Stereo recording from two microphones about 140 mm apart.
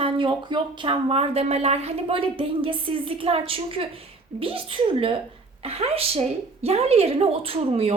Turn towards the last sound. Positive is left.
turn(degrees=-45)  # may be behind; listen again after turning